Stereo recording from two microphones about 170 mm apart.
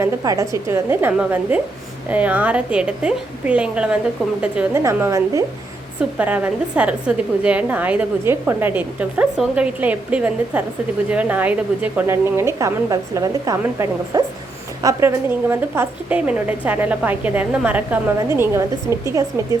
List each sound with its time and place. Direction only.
0.0 s a woman's voice: 15° right (ahead or behind)